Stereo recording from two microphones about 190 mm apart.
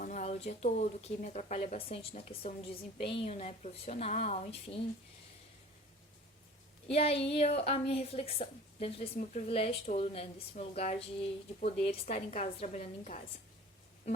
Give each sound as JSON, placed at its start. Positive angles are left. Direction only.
{"t": 0.0, "sound": "a woman's voice", "side_deg": 40}
{"t": 6.9, "sound": "a woman's voice", "side_deg": 30}